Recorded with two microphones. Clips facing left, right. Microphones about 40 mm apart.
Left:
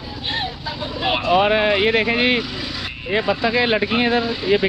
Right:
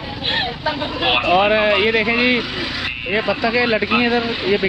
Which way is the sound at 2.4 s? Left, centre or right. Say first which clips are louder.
Right 4 dB; right.